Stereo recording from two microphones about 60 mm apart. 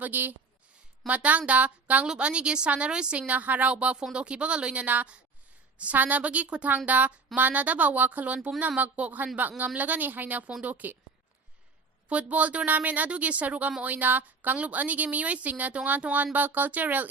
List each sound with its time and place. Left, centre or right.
0.0 s speech: right
12.0 s speech: right